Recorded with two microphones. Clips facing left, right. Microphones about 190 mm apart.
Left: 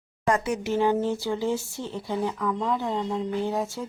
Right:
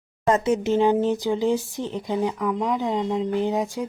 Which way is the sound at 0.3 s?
25° right (ahead or behind).